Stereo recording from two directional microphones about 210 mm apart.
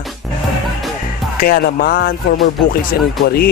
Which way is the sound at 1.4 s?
45° left (ahead or behind).